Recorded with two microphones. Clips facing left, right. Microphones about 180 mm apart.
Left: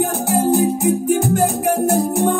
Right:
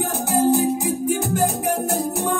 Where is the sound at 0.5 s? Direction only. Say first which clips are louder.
Left 4 dB; 50° left (ahead or behind).